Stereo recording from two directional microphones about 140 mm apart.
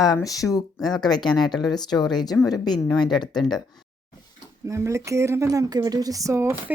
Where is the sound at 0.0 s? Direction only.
25° left (ahead or behind).